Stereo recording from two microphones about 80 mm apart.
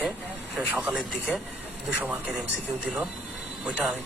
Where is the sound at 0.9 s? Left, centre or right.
Centre.